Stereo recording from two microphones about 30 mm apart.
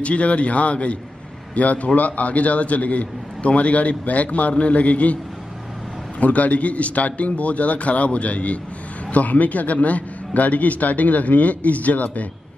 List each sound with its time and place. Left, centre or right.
0.0 s a man's voice: left
9.1 s a man's voice: left